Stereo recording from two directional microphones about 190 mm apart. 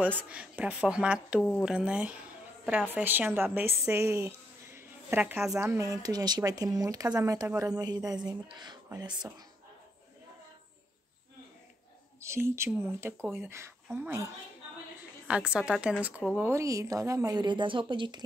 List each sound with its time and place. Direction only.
0.3 s a woman's voice: 5° right (ahead or behind)
4.7 s a sound: 10° right (ahead or behind)
5.5 s speech: 15° right (ahead or behind)
12.2 s a woman's voice: 15° right (ahead or behind)